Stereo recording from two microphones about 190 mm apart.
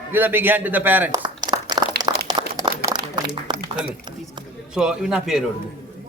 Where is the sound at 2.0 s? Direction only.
20° right (ahead or behind).